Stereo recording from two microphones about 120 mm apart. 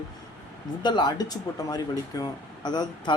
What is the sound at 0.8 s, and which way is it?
Speech, 35° left (ahead or behind).